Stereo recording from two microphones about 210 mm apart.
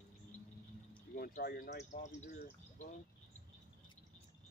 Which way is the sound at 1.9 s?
35° left (ahead or behind).